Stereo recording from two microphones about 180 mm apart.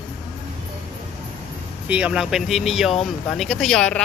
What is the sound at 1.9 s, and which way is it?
Speech, 5° right (ahead or behind).